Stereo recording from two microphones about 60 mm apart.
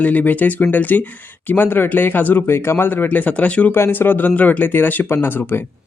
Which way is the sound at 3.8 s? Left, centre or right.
Left.